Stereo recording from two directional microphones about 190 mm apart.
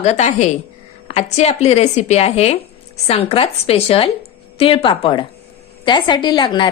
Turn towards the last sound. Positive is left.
turn(degrees=25)  # may be behind; listen again after turning